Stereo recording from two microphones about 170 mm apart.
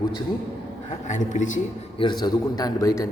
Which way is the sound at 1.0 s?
45° left (ahead or behind).